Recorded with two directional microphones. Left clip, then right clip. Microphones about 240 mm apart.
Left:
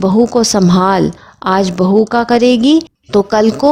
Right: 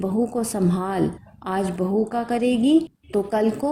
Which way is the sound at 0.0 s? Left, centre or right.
Left.